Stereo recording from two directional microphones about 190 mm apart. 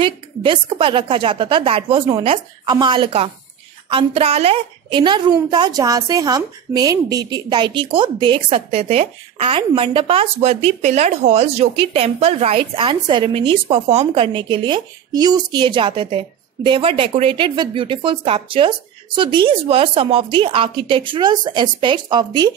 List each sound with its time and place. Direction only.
0.0 s a woman's voice: 25° right (ahead or behind)